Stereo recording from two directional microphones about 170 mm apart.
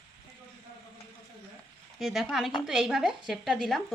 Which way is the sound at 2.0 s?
Centre (ahead or behind).